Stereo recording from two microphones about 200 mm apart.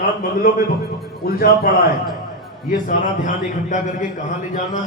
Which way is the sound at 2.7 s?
45° left (ahead or behind).